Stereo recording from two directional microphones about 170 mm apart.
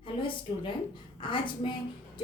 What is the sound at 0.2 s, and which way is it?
A woman's voice, 30° left (ahead or behind).